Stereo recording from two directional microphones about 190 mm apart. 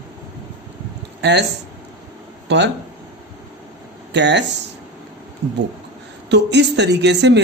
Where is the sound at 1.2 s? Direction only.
65° right (ahead or behind).